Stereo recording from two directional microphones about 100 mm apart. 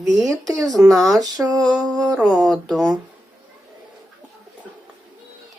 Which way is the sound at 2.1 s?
Centre (ahead or behind).